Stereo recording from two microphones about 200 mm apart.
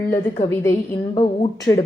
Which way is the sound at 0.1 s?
15° left (ahead or behind).